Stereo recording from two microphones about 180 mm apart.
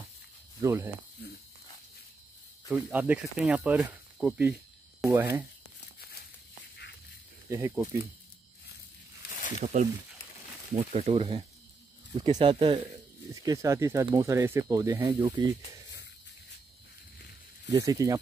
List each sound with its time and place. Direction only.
0.6 s speech: 15° right (ahead or behind)
2.7 s speech: 10° right (ahead or behind)
7.4 s speech: 15° right (ahead or behind)
9.6 s speech: 40° right (ahead or behind); by 15.5 s 25° right (ahead or behind)
17.6 s speech: 20° right (ahead or behind)